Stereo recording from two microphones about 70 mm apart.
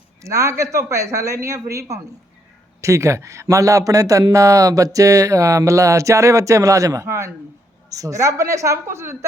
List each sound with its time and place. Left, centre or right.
0.2 s speech: right
7.9 s speech: right